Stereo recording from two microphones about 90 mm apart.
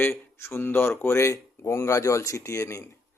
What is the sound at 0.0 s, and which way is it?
Speech, 25° left (ahead or behind).